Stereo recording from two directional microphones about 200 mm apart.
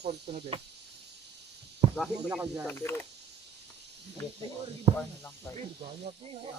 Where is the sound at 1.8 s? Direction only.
30° right (ahead or behind).